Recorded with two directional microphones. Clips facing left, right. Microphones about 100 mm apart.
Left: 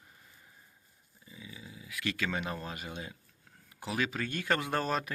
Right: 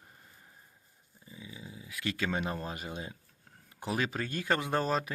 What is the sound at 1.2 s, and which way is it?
Speech, 25° right (ahead or behind).